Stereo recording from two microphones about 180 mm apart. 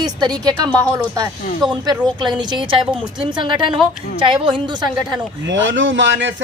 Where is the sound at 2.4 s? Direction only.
25° right (ahead or behind).